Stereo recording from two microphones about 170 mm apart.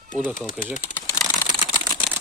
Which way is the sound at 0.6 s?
Centre (ahead or behind).